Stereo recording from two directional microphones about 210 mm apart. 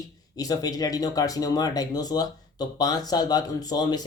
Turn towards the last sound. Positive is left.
turn(degrees=20)  # may be behind; listen again after turning